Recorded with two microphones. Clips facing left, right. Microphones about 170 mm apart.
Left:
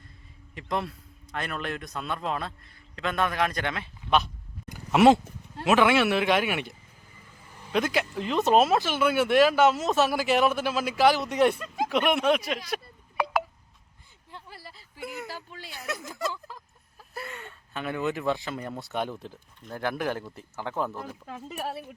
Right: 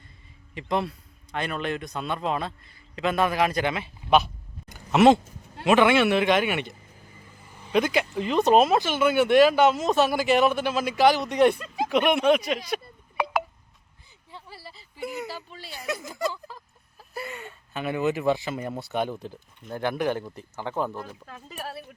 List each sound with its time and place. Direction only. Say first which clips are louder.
0.5 s speech: right 4 dB; centre (ahead or behind)
4.7 s a sound: right 1 dB; 5° left (ahead or behind)
5.6 s speech: right 2 dB; centre (ahead or behind)
15.7 s speech: right 4 dB; centre (ahead or behind)
21.2 s speech: left 3 dB; 15° left (ahead or behind)